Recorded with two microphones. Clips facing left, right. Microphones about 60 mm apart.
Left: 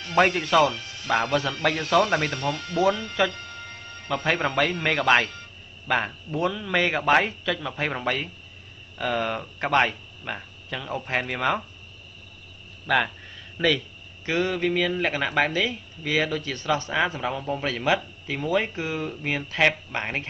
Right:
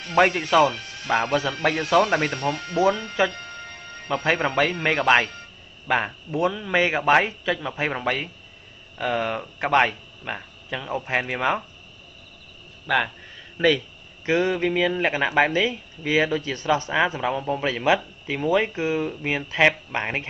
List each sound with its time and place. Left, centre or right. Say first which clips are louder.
0.3 s speech: right 2 dB; right
2.3 s speech: right 2 dB; right
4.1 s speech: right 2 dB; centre
12.8 s a man's voice: even; centre
14.2 s a sound: right 4 dB; right
14.5 s speech: right 2 dB; centre